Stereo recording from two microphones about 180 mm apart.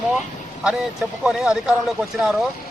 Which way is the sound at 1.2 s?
5° right (ahead or behind).